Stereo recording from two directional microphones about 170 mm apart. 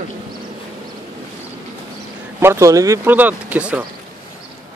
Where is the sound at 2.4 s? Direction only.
15° right (ahead or behind).